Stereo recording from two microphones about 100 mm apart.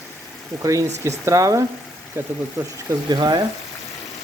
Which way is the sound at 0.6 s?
35° right (ahead or behind).